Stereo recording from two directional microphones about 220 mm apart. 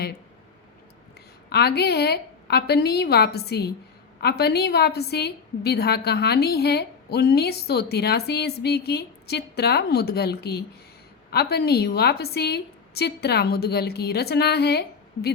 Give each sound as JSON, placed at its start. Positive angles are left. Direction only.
{"t": 1.5, "sound": "a woman's voice", "side_deg": 50}